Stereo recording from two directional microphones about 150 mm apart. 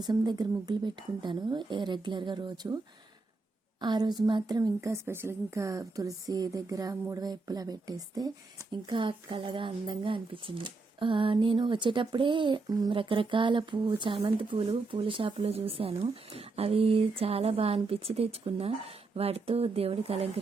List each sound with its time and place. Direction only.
0.0 s speech: 25° right (ahead or behind)
3.8 s speech: 30° right (ahead or behind)